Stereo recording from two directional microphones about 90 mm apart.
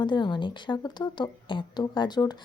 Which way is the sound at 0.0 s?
60° left (ahead or behind).